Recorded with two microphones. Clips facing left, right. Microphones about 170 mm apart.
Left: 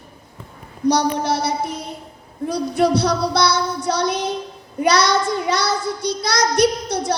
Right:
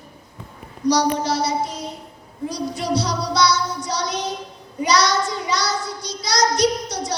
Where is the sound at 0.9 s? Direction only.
55° left (ahead or behind).